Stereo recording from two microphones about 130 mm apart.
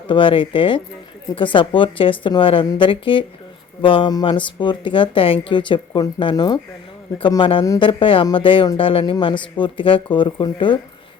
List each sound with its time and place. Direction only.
0.1 s speech: 40° left (ahead or behind)